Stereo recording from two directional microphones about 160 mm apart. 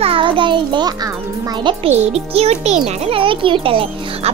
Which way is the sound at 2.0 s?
40° right (ahead or behind).